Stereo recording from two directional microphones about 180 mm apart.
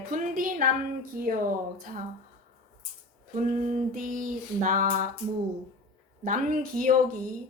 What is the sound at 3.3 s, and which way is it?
A woman's voice, 45° right (ahead or behind).